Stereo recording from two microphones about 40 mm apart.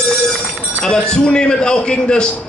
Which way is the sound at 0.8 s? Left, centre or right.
Left.